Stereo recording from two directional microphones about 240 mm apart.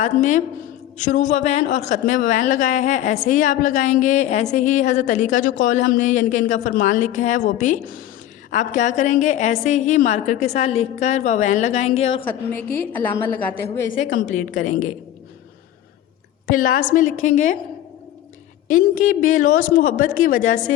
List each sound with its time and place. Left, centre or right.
0.0 s a woman's voice: left
12.2 s speech: centre
12.6 s speech: left
13.1 s speech: centre
13.8 s a woman's voice: left
14.3 s speech: left
16.5 s speech: left
18.7 s speech: left